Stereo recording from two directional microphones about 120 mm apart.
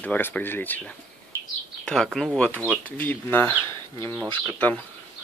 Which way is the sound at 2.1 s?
5° left (ahead or behind).